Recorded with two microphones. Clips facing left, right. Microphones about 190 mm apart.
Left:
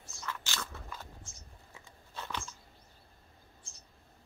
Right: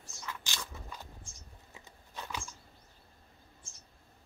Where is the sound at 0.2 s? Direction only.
15° right (ahead or behind).